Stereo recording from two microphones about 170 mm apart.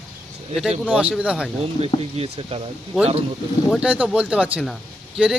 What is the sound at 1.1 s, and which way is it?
Speech, 5° right (ahead or behind).